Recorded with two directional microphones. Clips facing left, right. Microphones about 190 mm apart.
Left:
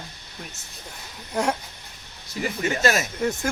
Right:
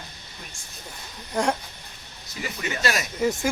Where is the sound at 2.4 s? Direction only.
45° left (ahead or behind).